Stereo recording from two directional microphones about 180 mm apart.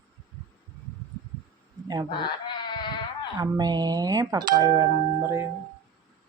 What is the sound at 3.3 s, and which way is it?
Speech, 20° right (ahead or behind).